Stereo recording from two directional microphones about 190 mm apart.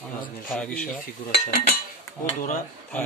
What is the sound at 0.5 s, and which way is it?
Speech, 5° left (ahead or behind).